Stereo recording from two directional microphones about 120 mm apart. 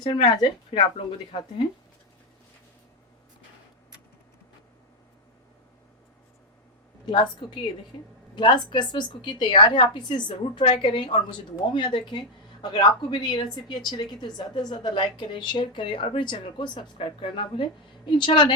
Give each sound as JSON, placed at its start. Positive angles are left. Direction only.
{"t": 0.0, "sound": "a woman's voice", "side_deg": 35}
{"t": 7.0, "sound": "a woman's voice", "side_deg": 40}